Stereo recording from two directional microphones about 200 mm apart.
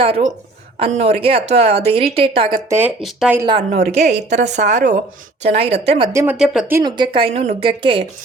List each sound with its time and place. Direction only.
0.0 s speech: 35° right (ahead or behind)
2.6 s speech: 10° right (ahead or behind)
3.4 s speech: 30° right (ahead or behind)
6.1 s speech: 5° right (ahead or behind)
6.7 s speech: 20° right (ahead or behind)